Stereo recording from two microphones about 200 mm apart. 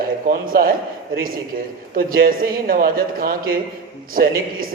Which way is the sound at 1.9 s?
45° right (ahead or behind).